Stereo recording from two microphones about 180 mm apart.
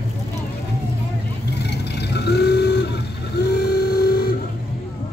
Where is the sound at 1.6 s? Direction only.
70° left (ahead or behind).